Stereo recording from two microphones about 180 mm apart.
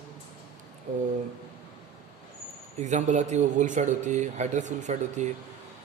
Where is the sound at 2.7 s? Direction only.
40° right (ahead or behind).